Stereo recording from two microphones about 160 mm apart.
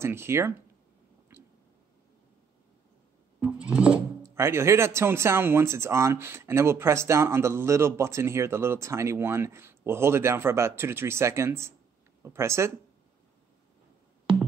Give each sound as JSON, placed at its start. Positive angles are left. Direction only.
{"t": 0.0, "sound": "speech", "side_deg": -15}
{"t": 3.3, "sound": "music", "side_deg": -10}
{"t": 4.2, "sound": "speech", "side_deg": -15}